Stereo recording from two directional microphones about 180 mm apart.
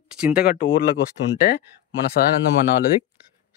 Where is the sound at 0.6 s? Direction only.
60° left (ahead or behind).